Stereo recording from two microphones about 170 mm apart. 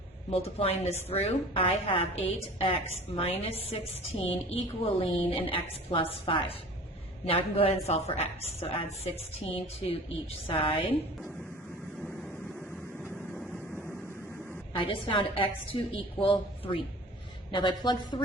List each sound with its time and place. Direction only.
0.3 s a woman's voice: 35° left (ahead or behind)
12.0 s vehicle: 5° left (ahead or behind)
14.8 s a woman's voice: 30° left (ahead or behind)